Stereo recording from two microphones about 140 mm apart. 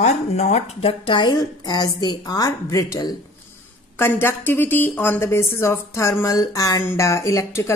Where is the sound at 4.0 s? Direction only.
15° left (ahead or behind).